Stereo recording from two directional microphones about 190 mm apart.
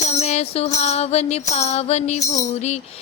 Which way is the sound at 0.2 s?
35° left (ahead or behind).